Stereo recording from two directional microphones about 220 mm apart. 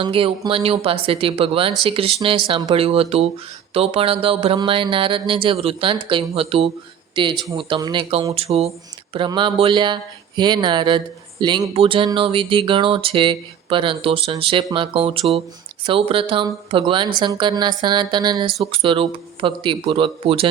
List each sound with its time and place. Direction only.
0.0 s speech: 25° right (ahead or behind)